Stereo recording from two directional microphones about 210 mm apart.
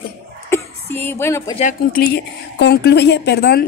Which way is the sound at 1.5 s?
40° left (ahead or behind).